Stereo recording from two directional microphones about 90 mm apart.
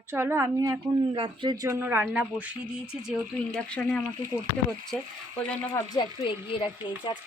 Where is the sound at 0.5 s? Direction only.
40° right (ahead or behind).